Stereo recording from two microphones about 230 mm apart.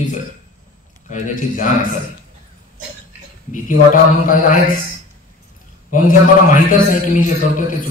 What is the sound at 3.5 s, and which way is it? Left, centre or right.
A man's voice, left.